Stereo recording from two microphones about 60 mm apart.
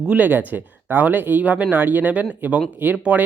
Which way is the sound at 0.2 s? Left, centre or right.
Right.